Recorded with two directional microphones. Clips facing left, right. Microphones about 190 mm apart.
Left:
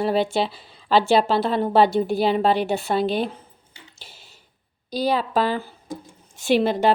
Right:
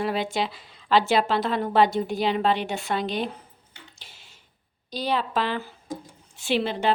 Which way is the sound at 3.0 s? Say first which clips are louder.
Left 5 dB; 5° left (ahead or behind).